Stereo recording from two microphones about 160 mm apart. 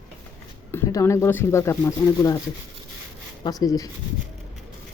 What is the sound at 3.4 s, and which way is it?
Speech, 25° left (ahead or behind).